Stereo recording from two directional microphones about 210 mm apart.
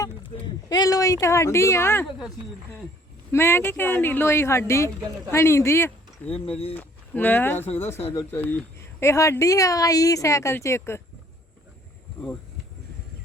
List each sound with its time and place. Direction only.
0.7 s speech: 15° left (ahead or behind)
3.3 s speech: 10° left (ahead or behind)
6.3 s speech: 25° left (ahead or behind)
6.7 s speech: 10° left (ahead or behind)